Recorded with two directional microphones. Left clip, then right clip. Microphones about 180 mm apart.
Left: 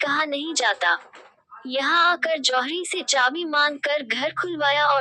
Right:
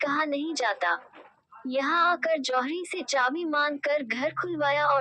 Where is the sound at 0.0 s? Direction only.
25° left (ahead or behind).